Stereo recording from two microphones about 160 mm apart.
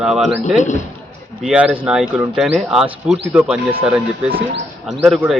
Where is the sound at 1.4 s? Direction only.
5° right (ahead or behind).